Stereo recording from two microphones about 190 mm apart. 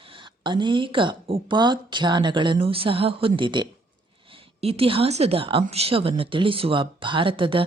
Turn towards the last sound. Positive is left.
turn(degrees=-30)  # may be behind; listen again after turning